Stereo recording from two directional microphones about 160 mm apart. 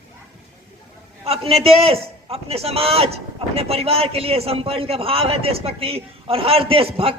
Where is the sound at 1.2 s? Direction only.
40° right (ahead or behind).